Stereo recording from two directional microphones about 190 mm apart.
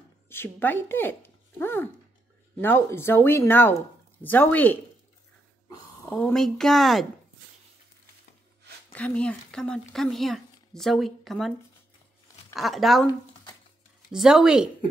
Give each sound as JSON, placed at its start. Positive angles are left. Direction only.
{"t": 0.3, "sound": "speech", "side_deg": 10}
{"t": 6.0, "sound": "speech", "side_deg": 5}
{"t": 8.9, "sound": "speech", "side_deg": 5}
{"t": 12.5, "sound": "speech", "side_deg": 0}
{"t": 13.0, "sound": "a sound", "side_deg": 20}
{"t": 14.1, "sound": "speech", "side_deg": 0}